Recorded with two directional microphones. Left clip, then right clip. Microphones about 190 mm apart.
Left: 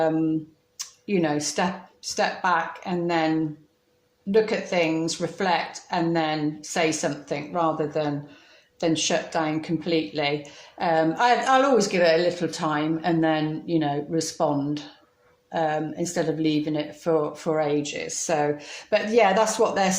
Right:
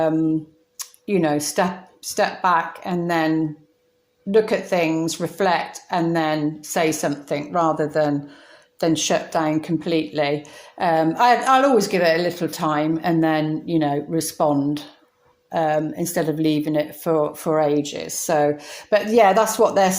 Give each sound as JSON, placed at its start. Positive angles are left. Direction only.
{"t": 0.8, "sound": "speech", "side_deg": -35}